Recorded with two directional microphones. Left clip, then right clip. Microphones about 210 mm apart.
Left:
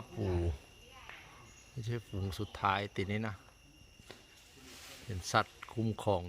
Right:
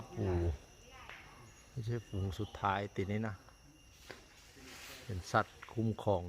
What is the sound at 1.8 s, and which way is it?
Speech, 10° left (ahead or behind).